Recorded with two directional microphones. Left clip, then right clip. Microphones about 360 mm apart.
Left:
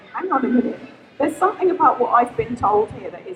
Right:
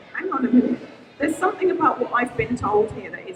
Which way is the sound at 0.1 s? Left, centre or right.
Centre.